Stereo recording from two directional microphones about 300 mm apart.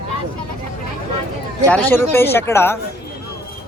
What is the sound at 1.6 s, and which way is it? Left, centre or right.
Speech, centre.